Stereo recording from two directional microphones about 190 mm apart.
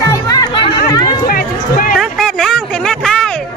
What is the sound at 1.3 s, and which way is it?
Run, 50° left (ahead or behind).